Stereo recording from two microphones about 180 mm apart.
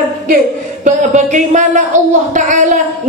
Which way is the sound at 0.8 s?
45° right (ahead or behind).